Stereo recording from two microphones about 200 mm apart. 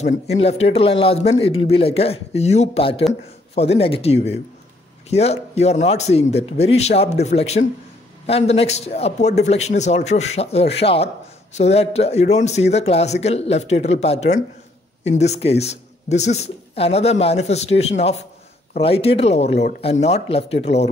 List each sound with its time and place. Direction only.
0.0 s speech: 30° left (ahead or behind)